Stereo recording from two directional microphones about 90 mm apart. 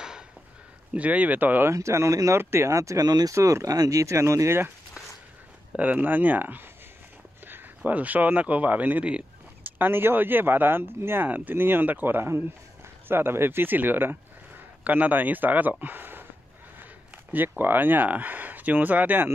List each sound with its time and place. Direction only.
0.9 s speech: 15° right (ahead or behind)
1.7 s speech: 35° right (ahead or behind)
5.8 s speech: 20° right (ahead or behind)
15.8 s a sound: 20° right (ahead or behind)
17.3 s speech: 20° right (ahead or behind)